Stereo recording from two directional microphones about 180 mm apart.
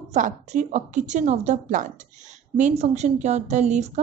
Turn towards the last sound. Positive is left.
turn(degrees=-40)  # may be behind; listen again after turning